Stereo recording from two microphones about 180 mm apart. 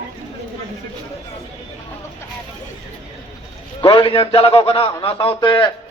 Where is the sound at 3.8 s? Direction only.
30° left (ahead or behind).